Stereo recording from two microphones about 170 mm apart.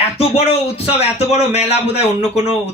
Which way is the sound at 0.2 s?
35° left (ahead or behind).